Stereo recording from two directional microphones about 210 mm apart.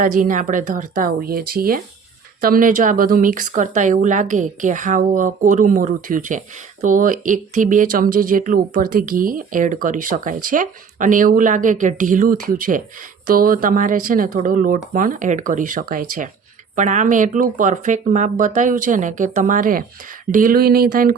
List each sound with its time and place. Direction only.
0.0 s speech: 40° right (ahead or behind)